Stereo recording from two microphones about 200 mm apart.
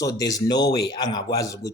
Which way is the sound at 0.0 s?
15° left (ahead or behind).